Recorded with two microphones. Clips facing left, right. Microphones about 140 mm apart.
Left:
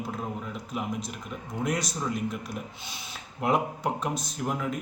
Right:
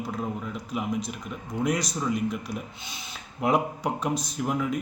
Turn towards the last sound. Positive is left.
turn(degrees=0)  # may be behind; listen again after turning